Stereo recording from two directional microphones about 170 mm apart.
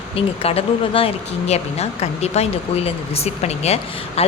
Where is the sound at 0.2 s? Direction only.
35° left (ahead or behind).